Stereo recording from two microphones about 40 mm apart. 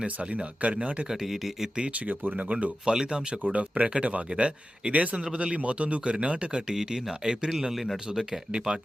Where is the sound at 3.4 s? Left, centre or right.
Right.